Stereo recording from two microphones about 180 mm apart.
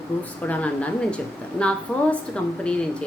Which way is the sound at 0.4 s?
5° left (ahead or behind).